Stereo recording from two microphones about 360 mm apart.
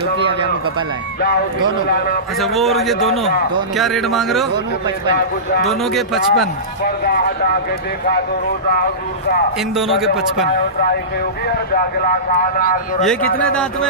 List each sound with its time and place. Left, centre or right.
2.4 s a man's voice: centre
5.7 s a man's voice: centre
6.8 s speech: left
9.8 s a man's voice: centre
11.4 s speech: left
13.0 s a man's voice: centre